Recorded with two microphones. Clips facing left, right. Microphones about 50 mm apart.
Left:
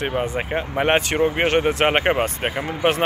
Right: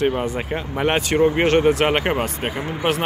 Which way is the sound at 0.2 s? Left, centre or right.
Left.